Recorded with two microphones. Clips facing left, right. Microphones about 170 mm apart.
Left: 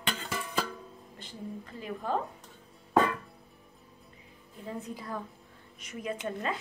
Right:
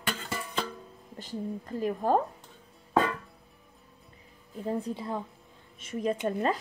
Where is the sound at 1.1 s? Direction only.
45° right (ahead or behind).